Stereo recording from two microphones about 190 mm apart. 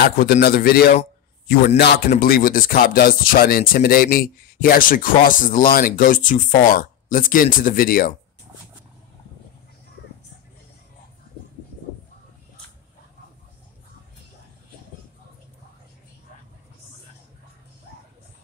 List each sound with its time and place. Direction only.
0.2 s a man's voice: 55° left (ahead or behind)
1.8 s music: 55° left (ahead or behind)